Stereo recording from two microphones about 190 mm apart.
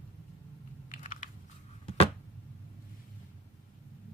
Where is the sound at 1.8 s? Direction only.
30° left (ahead or behind).